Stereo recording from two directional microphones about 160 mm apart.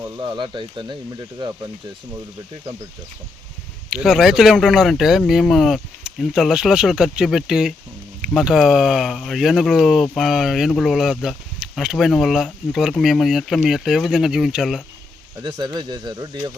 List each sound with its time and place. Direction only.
0.0 s speech: 30° right (ahead or behind)
3.8 s speech: 5° right (ahead or behind)
15.4 s speech: 25° right (ahead or behind)